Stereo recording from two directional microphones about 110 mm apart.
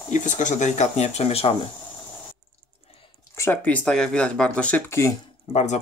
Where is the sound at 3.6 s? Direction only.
10° left (ahead or behind).